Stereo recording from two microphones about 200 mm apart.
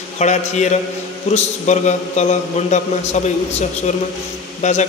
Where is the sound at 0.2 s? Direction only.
35° left (ahead or behind).